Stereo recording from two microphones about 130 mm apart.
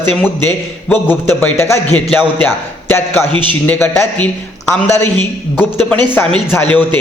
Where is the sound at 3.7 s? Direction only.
15° left (ahead or behind).